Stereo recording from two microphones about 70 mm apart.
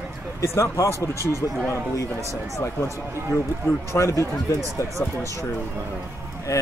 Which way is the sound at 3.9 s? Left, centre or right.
Left.